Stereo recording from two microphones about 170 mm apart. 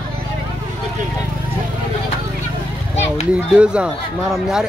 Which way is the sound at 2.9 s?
40° left (ahead or behind).